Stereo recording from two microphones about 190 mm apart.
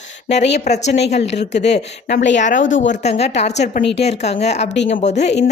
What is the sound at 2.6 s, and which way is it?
Speech, 80° left.